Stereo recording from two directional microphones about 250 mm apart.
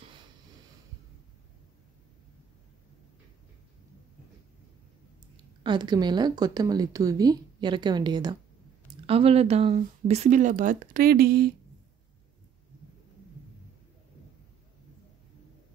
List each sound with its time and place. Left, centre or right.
5.6 s speech: centre; by 11.5 s right